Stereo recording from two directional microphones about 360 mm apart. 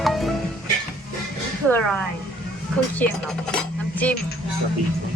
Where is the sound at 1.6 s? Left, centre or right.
Centre.